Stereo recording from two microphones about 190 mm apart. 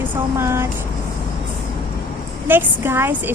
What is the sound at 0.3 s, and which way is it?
Speech, 15° right (ahead or behind).